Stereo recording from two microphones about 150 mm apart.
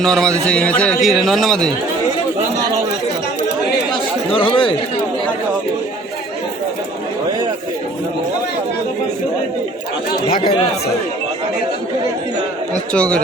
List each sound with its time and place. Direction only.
0.0 s a man's voice: 5° left (ahead or behind)
4.3 s speech: 30° left (ahead or behind)
10.1 s speech: 80° left
12.9 s speech: 5° left (ahead or behind)